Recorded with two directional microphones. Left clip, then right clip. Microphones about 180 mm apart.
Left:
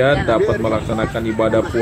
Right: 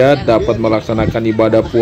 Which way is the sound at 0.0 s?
50° right (ahead or behind).